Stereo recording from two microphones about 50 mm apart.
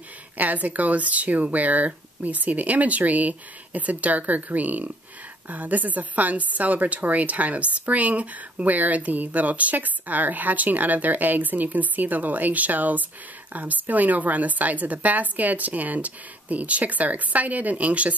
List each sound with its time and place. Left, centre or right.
0.4 s a woman's voice: right